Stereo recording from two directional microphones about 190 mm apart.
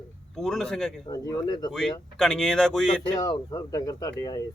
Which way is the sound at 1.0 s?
20° left (ahead or behind).